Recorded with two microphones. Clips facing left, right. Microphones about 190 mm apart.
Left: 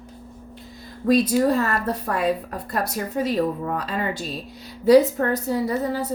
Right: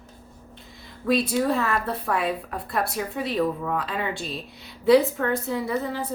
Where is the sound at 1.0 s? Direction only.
40° left (ahead or behind).